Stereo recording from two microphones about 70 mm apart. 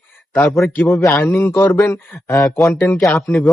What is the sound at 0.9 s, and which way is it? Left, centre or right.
A man's voice, left.